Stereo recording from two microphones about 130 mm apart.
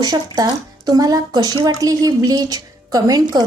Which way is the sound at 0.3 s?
30° right (ahead or behind).